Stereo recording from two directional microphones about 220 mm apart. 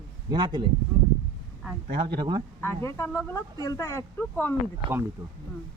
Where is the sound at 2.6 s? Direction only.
10° left (ahead or behind).